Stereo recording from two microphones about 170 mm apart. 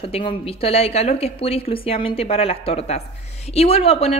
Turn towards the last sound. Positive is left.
turn(degrees=35)  # may be behind; listen again after turning